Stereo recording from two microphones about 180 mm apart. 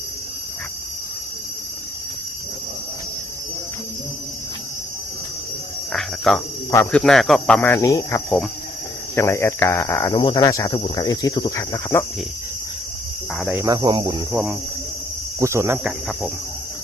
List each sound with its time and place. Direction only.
5.9 s cricket: centre (ahead or behind)
6.7 s speech: 15° left (ahead or behind)
7.0 s cricket: centre (ahead or behind)
9.1 s speech: 15° left (ahead or behind)
13.5 s speech: 10° right (ahead or behind)
13.7 s cricket: 25° right (ahead or behind)
15.4 s speech: 15° right (ahead or behind)